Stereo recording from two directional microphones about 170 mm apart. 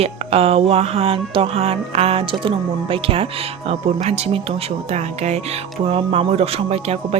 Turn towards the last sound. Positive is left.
turn(degrees=-35)  # may be behind; listen again after turning